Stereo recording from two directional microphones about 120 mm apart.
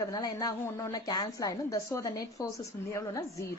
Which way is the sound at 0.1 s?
30° left (ahead or behind).